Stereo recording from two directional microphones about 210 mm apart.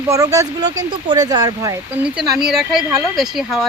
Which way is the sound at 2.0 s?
5° right (ahead or behind).